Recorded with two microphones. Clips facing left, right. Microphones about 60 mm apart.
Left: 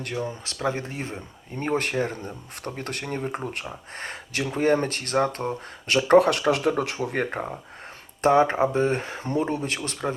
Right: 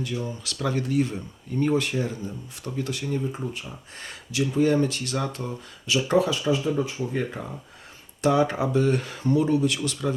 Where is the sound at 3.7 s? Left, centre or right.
Left.